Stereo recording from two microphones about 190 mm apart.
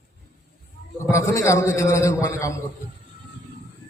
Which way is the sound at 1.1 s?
15° left (ahead or behind).